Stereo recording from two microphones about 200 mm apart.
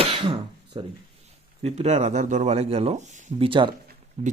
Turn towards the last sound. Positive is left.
turn(degrees=-35)  # may be behind; listen again after turning